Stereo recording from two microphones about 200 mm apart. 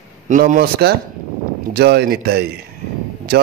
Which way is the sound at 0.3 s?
45° right (ahead or behind).